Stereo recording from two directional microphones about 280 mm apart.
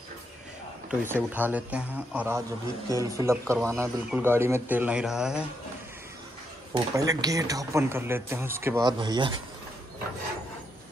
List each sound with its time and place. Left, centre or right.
0.8 s a man's voice: centre
6.7 s a man's voice: centre